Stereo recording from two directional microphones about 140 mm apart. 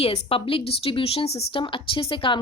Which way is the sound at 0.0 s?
45° left (ahead or behind).